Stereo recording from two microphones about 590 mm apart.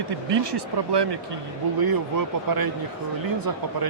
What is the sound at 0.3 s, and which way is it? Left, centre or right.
Speech, right.